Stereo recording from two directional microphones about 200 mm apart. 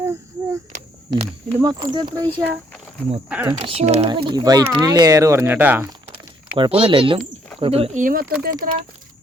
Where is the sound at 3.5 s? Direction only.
30° right (ahead or behind); by 5.8 s 10° right (ahead or behind).